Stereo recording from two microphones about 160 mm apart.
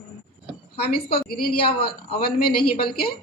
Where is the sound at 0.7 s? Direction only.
75° left (ahead or behind).